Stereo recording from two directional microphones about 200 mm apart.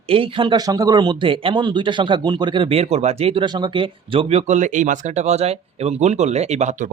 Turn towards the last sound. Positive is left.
turn(degrees=-40)  # may be behind; listen again after turning